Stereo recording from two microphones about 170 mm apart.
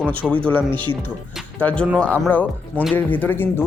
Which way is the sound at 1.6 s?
5° left (ahead or behind).